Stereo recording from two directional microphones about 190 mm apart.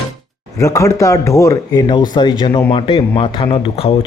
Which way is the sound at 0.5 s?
15° left (ahead or behind).